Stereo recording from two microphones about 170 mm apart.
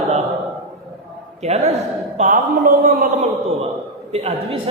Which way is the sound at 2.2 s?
50° right (ahead or behind).